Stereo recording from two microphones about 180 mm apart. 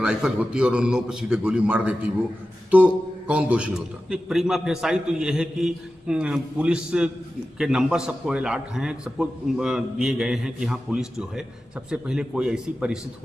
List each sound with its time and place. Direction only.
0.0 s a man's voice: 5° right (ahead or behind)